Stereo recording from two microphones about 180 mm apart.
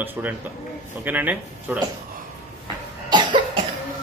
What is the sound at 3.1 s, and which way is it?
Cough, 25° right (ahead or behind).